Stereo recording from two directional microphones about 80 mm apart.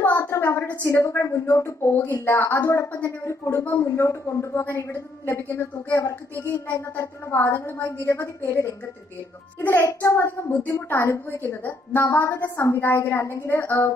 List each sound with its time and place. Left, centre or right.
0.0 s a sound: left
0.8 s a woman's voice: left
9.6 s a child's voice: left
9.8 s a woman's voice: left